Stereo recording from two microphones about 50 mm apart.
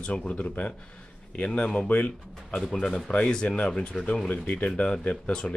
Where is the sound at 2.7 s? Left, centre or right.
Centre.